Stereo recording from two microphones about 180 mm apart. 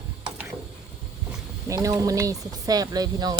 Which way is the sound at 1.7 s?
15° right (ahead or behind).